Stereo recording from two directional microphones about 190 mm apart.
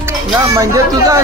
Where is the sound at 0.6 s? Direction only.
15° right (ahead or behind).